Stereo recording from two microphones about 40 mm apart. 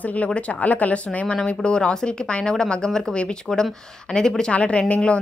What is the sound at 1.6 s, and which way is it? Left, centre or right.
Speech, left.